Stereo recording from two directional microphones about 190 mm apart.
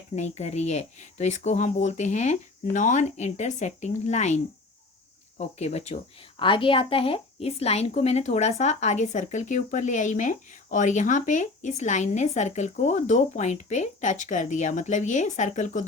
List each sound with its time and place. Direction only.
0.2 s a woman's voice: 35° left (ahead or behind)
5.4 s a woman's voice: 35° left (ahead or behind)